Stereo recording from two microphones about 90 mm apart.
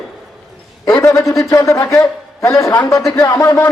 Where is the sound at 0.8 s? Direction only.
35° left (ahead or behind).